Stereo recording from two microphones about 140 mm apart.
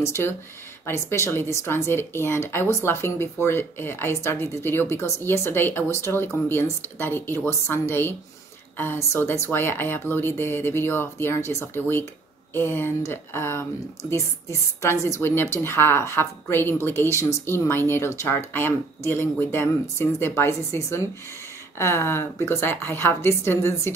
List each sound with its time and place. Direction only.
0.0 s speech: 20° left (ahead or behind)